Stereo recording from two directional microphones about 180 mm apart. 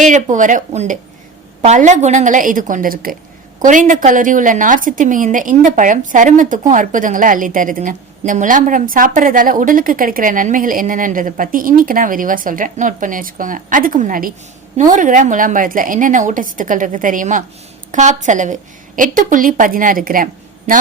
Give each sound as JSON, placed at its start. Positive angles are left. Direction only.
{"t": 0.0, "sound": "a woman's voice", "side_deg": -45}